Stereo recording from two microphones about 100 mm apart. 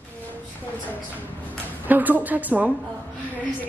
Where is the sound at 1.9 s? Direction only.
15° right (ahead or behind).